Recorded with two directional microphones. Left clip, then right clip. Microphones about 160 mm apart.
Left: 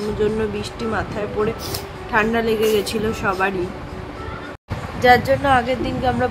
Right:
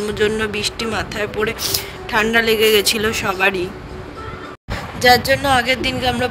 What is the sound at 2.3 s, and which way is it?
A man's voice, 80° right.